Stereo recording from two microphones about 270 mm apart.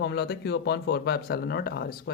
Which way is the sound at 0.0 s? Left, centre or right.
Left.